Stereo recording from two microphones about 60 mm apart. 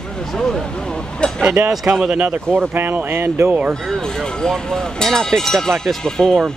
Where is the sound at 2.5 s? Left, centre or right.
Right.